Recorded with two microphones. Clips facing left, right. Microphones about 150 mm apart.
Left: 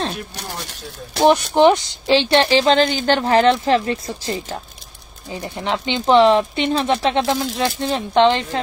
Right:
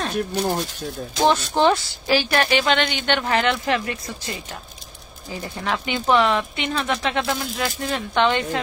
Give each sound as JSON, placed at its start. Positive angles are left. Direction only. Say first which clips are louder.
{"t": 0.3, "sound": "speech", "louder": "right 9 dB", "side_deg": -65}
{"t": 1.2, "sound": "a woman's voice", "louder": "left 5 dB", "side_deg": 15}
{"t": 5.3, "sound": "speech", "louder": "left 3 dB", "side_deg": 20}